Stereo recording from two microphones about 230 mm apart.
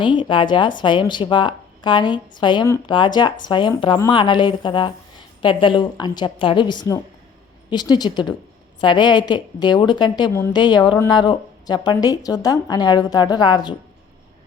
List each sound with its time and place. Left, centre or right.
0.0 s a woman's voice: left